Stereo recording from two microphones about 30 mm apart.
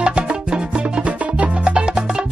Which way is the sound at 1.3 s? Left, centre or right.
Right.